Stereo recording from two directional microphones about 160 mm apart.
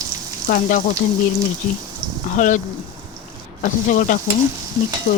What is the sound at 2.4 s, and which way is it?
Speech, 50° left (ahead or behind).